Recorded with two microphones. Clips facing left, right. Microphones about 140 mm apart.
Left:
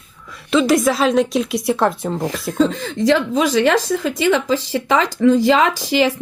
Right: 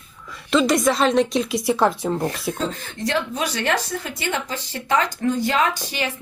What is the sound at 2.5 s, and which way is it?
A woman's voice, 90° left.